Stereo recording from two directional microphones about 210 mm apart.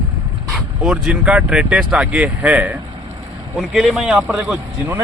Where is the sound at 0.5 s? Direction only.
5° right (ahead or behind).